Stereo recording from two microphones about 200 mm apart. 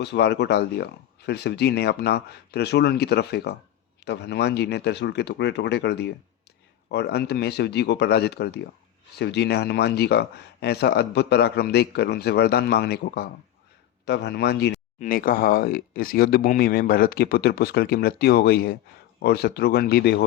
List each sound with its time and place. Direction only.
0.0 s speech: 55° left (ahead or behind)
14.9 s speech: 40° left (ahead or behind)